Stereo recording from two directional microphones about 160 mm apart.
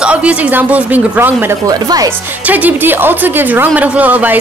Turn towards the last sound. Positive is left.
turn(degrees=-10)  # may be behind; listen again after turning